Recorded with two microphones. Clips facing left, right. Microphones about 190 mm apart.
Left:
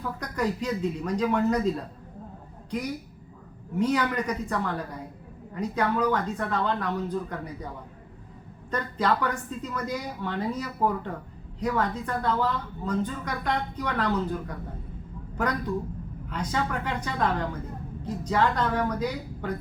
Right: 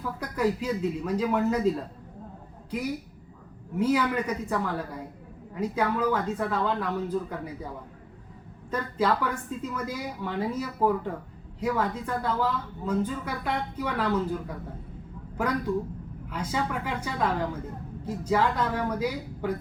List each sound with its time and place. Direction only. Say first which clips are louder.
0.2 s speech: right 3 dB; 5° right (ahead or behind)
2.7 s speech: even; 5° right (ahead or behind)
5.5 s speech: left 1 dB; 5° right (ahead or behind)
8.7 s speech: even; 5° right (ahead or behind)